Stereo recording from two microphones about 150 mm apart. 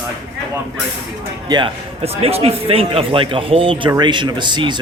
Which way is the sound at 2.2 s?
40° right (ahead or behind).